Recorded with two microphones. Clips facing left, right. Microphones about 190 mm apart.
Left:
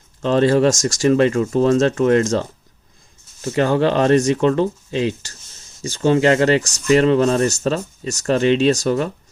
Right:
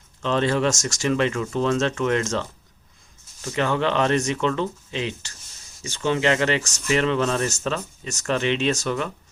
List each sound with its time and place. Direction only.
0.2 s speech: 40° left (ahead or behind)